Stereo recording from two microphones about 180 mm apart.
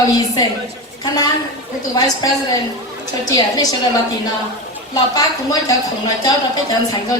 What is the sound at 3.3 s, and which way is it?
Speech, 20° left (ahead or behind).